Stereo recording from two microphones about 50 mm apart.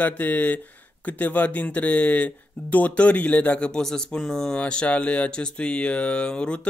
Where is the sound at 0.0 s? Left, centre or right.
Left; by 4.6 s centre.